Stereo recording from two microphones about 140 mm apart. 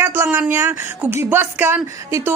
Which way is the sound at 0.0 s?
15° right (ahead or behind).